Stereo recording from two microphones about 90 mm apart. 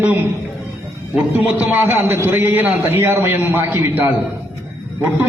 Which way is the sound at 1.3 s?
20° right (ahead or behind).